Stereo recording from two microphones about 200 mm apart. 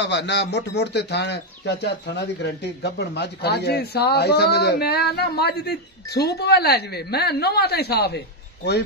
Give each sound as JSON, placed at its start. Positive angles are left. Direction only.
{"t": 0.0, "sound": "speech", "side_deg": 60}